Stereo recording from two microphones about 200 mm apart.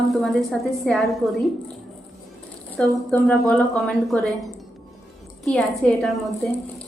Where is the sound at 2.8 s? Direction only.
5° left (ahead or behind).